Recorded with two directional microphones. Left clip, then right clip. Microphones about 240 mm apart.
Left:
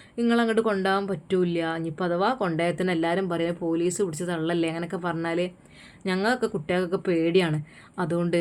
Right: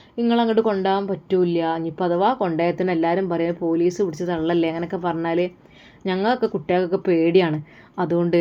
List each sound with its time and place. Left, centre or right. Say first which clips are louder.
0.2 s speech: right 4 dB; centre